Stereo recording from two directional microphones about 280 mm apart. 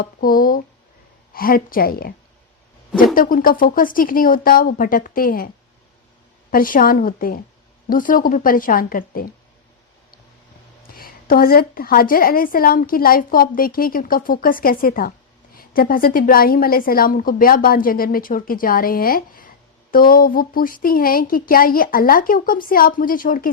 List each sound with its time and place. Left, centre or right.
0.0 s a woman's voice: left
3.2 s speech: left
6.5 s a woman's voice: left
10.8 s a woman's voice: left